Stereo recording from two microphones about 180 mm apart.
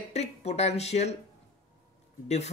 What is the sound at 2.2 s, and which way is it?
Speech, 35° left (ahead or behind).